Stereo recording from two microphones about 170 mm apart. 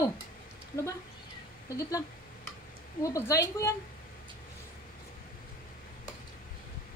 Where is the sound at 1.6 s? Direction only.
20° left (ahead or behind).